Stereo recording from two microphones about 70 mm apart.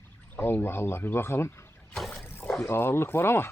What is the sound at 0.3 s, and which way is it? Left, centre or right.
Speech, left.